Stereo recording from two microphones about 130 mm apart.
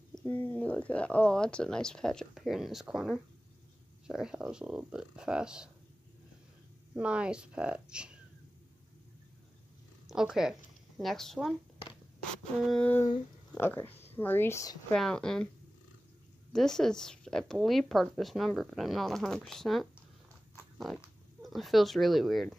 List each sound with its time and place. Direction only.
0.1 s a woman's voice: 15° left (ahead or behind); by 5.7 s 5° right (ahead or behind)
7.0 s speech: 10° right (ahead or behind)
10.0 s a woman's voice: 5° right (ahead or behind)
12.6 s a woman's voice: 5° left (ahead or behind)
13.5 s speech: 15° left (ahead or behind)
14.9 s a woman's voice: 5° left (ahead or behind)
16.5 s a woman's voice: 5° left (ahead or behind)